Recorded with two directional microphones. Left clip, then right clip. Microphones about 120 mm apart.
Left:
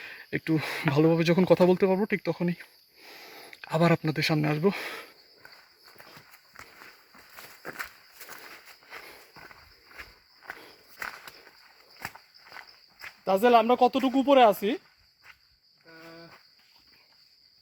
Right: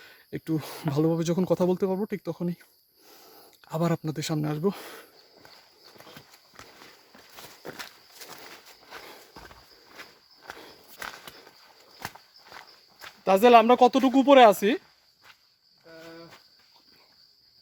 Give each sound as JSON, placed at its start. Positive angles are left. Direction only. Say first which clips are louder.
{"t": 0.0, "sound": "a sound", "louder": "left 5 dB", "side_deg": -20}
{"t": 0.5, "sound": "speech", "louder": "left 3 dB", "side_deg": -30}
{"t": 3.0, "sound": "sniff", "louder": "left 6 dB", "side_deg": -40}
{"t": 3.3, "sound": "speech", "louder": "left 4 dB", "side_deg": -15}
{"t": 7.4, "sound": "walk", "louder": "left 2 dB", "side_deg": -5}
{"t": 8.9, "sound": "walk", "louder": "right 1 dB", "side_deg": -5}
{"t": 10.6, "sound": "walk", "louder": "left 1 dB", "side_deg": -5}
{"t": 13.2, "sound": "speech", "louder": "right 4 dB", "side_deg": -15}